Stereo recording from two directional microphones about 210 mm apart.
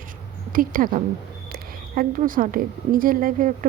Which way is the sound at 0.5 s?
40° right (ahead or behind).